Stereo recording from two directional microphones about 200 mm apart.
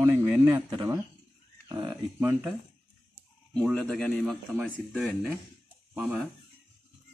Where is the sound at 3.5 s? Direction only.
Centre (ahead or behind).